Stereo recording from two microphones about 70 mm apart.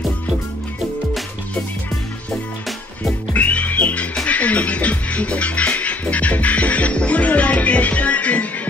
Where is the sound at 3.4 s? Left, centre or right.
Left.